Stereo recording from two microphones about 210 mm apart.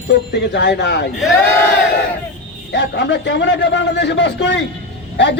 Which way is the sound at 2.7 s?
55° left (ahead or behind).